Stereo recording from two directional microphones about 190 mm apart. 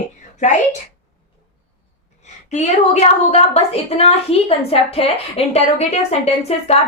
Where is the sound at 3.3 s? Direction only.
35° left (ahead or behind).